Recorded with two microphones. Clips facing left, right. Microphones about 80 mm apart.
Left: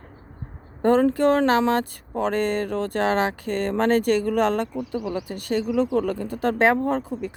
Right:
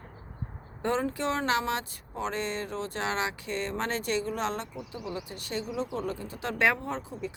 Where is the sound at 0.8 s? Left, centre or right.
Left.